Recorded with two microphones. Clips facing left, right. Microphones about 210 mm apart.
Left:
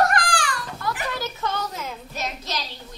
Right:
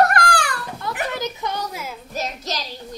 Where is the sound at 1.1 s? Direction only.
20° right (ahead or behind).